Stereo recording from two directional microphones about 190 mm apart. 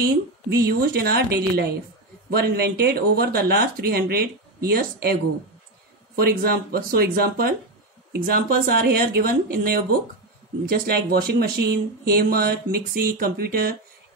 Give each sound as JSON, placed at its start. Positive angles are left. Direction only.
{"t": 0.0, "sound": "a woman's voice", "side_deg": -55}
{"t": 6.1, "sound": "speech", "side_deg": -55}